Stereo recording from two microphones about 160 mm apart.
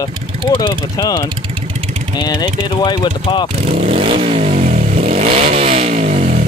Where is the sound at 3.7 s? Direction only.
40° right (ahead or behind).